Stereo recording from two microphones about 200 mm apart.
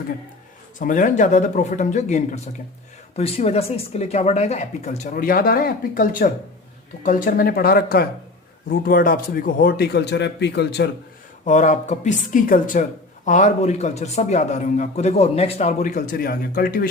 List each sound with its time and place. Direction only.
0.8 s a man's voice: 40° left (ahead or behind)
11.4 s a man's voice: 35° left (ahead or behind)